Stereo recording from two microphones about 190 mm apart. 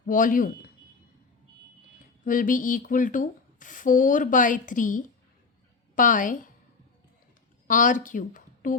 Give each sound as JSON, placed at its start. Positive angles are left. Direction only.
{"t": 0.0, "sound": "a man's voice", "side_deg": 45}
{"t": 2.2, "sound": "speech", "side_deg": 45}
{"t": 7.7, "sound": "a woman's voice", "side_deg": 45}